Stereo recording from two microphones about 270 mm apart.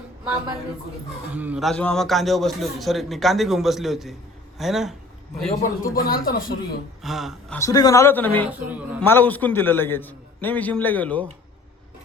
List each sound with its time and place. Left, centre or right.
1.3 s a man's voice: centre
5.4 s a man's voice: centre
5.9 s speech: left
7.0 s speech: centre
7.6 s a man's voice: centre
8.4 s a man's voice: centre
9.0 s a man's voice: centre